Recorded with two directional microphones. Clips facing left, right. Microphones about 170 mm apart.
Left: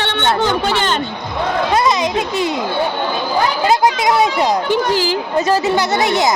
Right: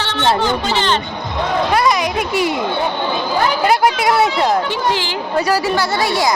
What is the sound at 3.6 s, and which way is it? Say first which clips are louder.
Speech: left 1 dB; 20° left (ahead or behind).